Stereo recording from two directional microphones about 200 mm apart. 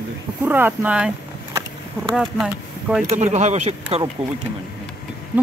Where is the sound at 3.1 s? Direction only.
35° right (ahead or behind).